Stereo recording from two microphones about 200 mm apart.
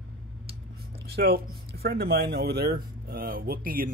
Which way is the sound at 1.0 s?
50° right (ahead or behind).